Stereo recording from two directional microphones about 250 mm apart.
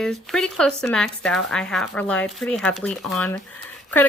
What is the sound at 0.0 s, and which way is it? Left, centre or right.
A woman's voice, centre.